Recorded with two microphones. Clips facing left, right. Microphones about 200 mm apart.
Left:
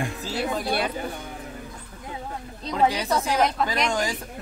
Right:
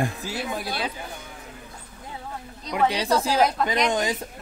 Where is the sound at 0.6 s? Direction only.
55° left (ahead or behind).